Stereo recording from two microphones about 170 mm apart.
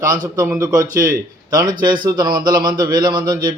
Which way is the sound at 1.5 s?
25° right (ahead or behind).